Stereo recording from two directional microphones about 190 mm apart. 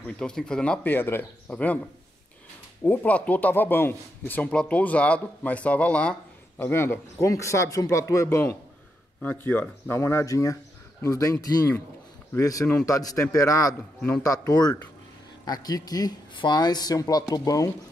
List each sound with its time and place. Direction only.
0.2 s speech: 5° left (ahead or behind)
2.8 s speech: 10° left (ahead or behind)